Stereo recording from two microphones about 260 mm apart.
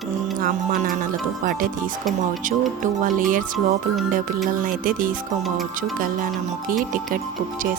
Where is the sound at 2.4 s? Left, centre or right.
Right.